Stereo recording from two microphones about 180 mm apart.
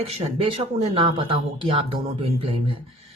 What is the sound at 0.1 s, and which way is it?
Speech, 30° right (ahead or behind).